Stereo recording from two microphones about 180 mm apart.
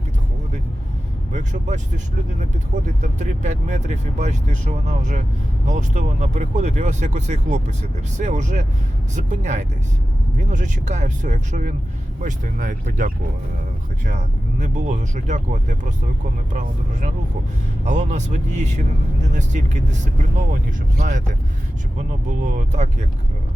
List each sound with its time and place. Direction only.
1.3 s speech: 40° right (ahead or behind)
3.0 s speech: 40° right (ahead or behind)
14.1 s speech: 40° right (ahead or behind)
21.0 s speech: 45° right (ahead or behind)
22.4 s speech: 40° right (ahead or behind)